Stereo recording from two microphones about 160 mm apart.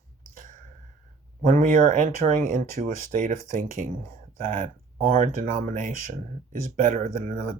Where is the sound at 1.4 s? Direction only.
55° right (ahead or behind).